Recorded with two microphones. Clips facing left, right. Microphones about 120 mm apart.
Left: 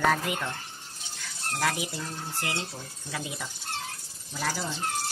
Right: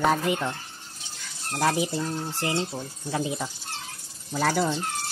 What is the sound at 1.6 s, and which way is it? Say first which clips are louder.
Speech: right 6 dB; 30° right (ahead or behind).